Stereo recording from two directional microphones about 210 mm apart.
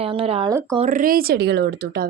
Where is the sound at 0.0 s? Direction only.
25° right (ahead or behind).